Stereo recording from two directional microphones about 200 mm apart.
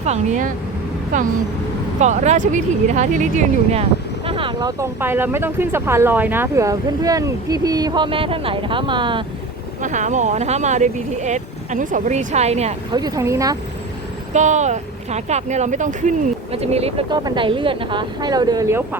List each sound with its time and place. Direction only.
0.0 s speech: 35° right (ahead or behind)
9.8 s speech: 35° right (ahead or behind)
12.9 s speech: 20° right (ahead or behind)
14.3 s speech: 35° right (ahead or behind); by 18.9 s 15° right (ahead or behind)